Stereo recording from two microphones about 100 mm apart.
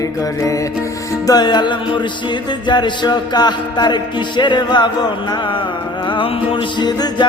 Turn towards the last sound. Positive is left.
turn(degrees=45)  # may be behind; listen again after turning